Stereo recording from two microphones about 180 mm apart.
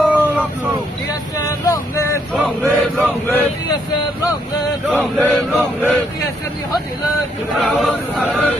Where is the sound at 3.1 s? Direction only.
10° left (ahead or behind).